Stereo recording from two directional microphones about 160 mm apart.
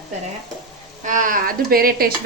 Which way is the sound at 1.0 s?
55° right (ahead or behind).